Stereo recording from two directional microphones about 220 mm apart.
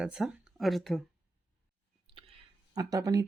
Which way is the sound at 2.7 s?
15° right (ahead or behind).